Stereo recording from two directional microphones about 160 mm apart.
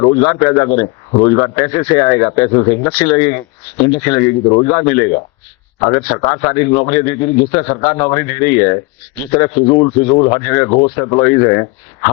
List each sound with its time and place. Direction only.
0.0 s speech: 25° left (ahead or behind)
4.4 s speech: 30° left (ahead or behind)
9.6 s speech: 30° left (ahead or behind)
10.4 s speech: 20° left (ahead or behind)
10.7 s speech: 35° left (ahead or behind)
10.9 s speech: 20° left (ahead or behind)